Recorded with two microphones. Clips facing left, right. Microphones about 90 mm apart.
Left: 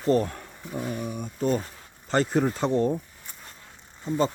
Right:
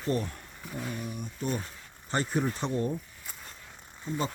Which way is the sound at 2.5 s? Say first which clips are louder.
Left 7 dB; 40° left (ahead or behind).